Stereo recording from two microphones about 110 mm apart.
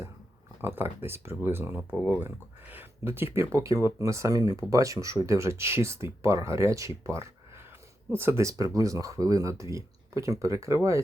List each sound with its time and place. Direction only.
0.6 s speech: 20° right (ahead or behind)